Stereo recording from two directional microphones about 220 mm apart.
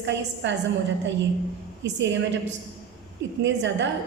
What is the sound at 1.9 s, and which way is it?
Speech, 55° right (ahead or behind).